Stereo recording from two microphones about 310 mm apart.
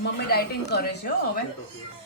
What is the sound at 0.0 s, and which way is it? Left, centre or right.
A woman's voice, left.